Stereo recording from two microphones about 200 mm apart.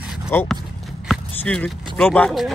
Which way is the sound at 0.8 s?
Centre (ahead or behind).